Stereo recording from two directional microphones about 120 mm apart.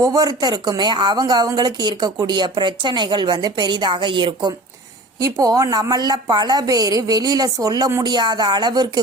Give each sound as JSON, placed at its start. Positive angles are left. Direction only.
{"t": 0.0, "sound": "speech", "side_deg": -30}